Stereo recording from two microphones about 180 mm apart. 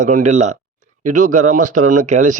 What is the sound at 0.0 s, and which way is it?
A man's voice, 40° right (ahead or behind).